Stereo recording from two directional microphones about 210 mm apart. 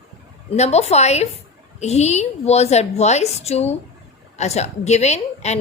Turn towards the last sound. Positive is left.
turn(degrees=30)  # may be behind; listen again after turning